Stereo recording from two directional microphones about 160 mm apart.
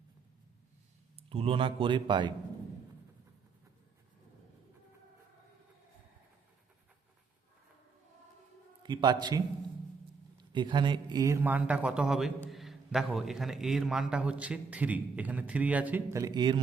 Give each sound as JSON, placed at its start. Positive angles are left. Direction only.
{"t": 1.1, "sound": "a man's voice", "side_deg": -35}
{"t": 8.8, "sound": "a man's voice", "side_deg": -30}
{"t": 11.4, "sound": "a man's voice", "side_deg": -10}